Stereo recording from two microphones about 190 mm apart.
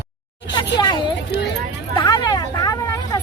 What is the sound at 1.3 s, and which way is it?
Speech, 65° left (ahead or behind).